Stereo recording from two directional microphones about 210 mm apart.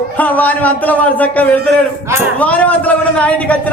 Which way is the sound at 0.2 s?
5° left (ahead or behind).